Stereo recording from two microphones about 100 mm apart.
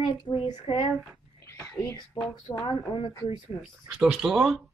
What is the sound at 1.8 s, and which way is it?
Speech, 30° left (ahead or behind).